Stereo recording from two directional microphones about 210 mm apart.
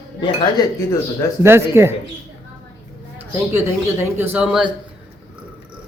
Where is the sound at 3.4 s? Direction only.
10° right (ahead or behind).